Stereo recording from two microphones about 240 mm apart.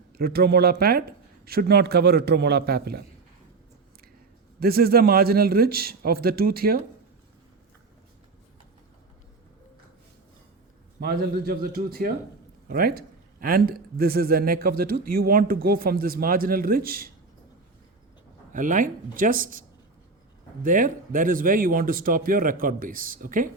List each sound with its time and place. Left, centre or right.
0.2 s speech: right
4.6 s speech: right
11.0 s speech: right
18.5 s speech: right